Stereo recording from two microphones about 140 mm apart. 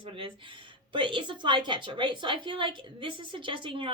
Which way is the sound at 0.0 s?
40° right (ahead or behind).